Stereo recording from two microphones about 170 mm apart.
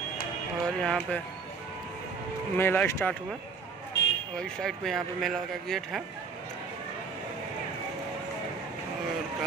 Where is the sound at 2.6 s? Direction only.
15° left (ahead or behind).